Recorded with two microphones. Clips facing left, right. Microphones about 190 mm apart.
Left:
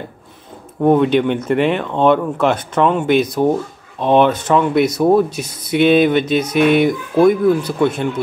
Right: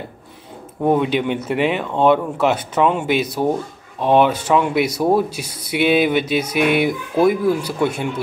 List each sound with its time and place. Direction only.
0.7 s speech: 5° right (ahead or behind)